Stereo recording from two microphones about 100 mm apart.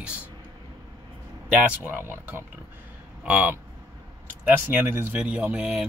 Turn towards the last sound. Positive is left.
turn(degrees=-10)  # may be behind; listen again after turning